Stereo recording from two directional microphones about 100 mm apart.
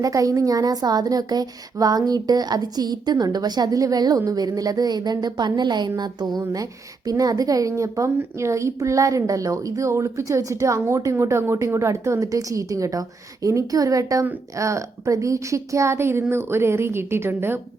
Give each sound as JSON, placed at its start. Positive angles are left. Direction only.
{"t": 0.0, "sound": "a woman's voice", "side_deg": -35}